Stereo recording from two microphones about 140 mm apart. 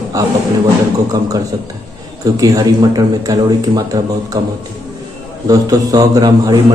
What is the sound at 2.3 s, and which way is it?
A man's voice, 25° right (ahead or behind).